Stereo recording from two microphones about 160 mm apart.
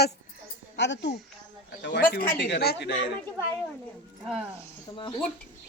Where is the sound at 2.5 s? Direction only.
85° left.